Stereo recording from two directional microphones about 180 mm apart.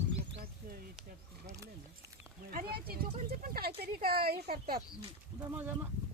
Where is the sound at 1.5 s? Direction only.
15° right (ahead or behind).